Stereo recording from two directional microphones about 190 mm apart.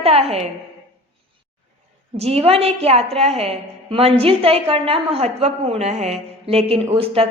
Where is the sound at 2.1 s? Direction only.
35° right (ahead or behind).